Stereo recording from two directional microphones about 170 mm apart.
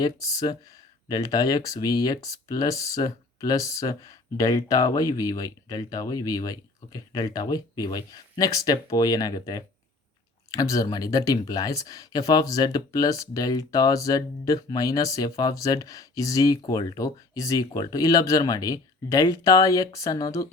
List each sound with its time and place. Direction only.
0.0 s speech: 20° left (ahead or behind)